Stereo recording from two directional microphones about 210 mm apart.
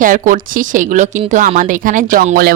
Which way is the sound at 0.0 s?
40° right (ahead or behind).